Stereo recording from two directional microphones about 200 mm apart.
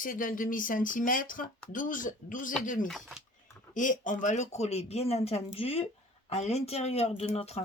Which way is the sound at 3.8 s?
40° left (ahead or behind).